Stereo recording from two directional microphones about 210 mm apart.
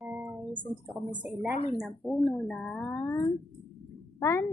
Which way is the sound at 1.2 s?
5° right (ahead or behind).